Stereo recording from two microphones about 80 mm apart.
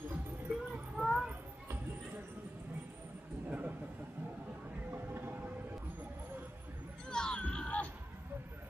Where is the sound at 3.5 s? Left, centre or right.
Centre.